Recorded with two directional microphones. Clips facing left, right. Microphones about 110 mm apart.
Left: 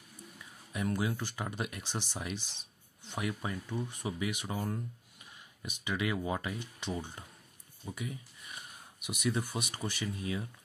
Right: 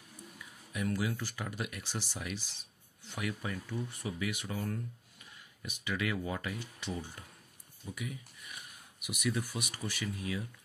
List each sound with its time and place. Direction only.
0.7 s speech: 25° left (ahead or behind)